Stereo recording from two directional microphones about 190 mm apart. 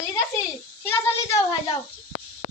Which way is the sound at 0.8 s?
15° left (ahead or behind).